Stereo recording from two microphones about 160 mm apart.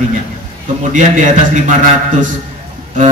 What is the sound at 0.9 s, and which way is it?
Speech, 50° right (ahead or behind).